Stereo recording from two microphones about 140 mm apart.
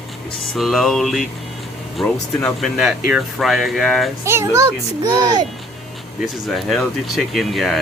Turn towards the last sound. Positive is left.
turn(degrees=0)  # may be behind; listen again after turning